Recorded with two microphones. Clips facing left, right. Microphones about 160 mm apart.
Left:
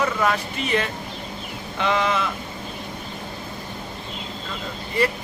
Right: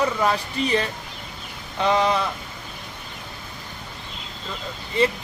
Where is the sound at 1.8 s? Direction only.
35° right (ahead or behind).